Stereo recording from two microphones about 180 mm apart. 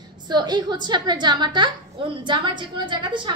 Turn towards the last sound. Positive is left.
turn(degrees=-25)  # may be behind; listen again after turning